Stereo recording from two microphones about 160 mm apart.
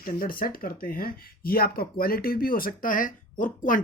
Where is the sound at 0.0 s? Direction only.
65° left (ahead or behind).